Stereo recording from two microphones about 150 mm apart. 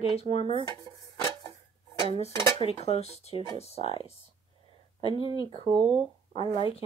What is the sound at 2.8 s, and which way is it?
Speech, 45° left (ahead or behind).